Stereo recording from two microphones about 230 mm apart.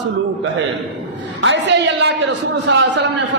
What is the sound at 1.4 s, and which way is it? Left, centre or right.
A man's voice, right.